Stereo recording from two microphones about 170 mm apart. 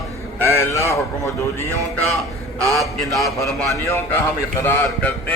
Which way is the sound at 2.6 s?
20° right (ahead or behind).